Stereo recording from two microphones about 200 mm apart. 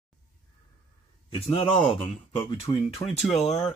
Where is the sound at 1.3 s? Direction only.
30° left (ahead or behind).